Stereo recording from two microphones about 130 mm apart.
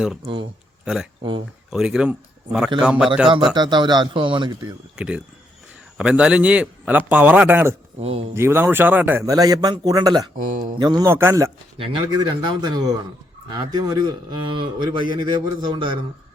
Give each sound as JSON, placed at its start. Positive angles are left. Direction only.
{"t": 1.2, "sound": "a man's voice", "side_deg": -40}
{"t": 1.7, "sound": "speech", "side_deg": -5}
{"t": 3.5, "sound": "a man's voice", "side_deg": -35}
{"t": 4.9, "sound": "a man's voice", "side_deg": -10}
{"t": 8.0, "sound": "speech", "side_deg": -50}
{"t": 8.4, "sound": "a man's voice", "side_deg": -20}
{"t": 9.2, "sound": "a man's voice", "side_deg": -30}
{"t": 10.3, "sound": "speech", "side_deg": -90}
{"t": 10.8, "sound": "a man's voice", "side_deg": -30}
{"t": 11.1, "sound": "speech", "side_deg": -20}
{"t": 11.8, "sound": "a man's voice", "side_deg": -40}